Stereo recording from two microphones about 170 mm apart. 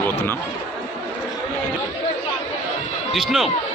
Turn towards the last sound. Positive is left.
turn(degrees=0)  # may be behind; listen again after turning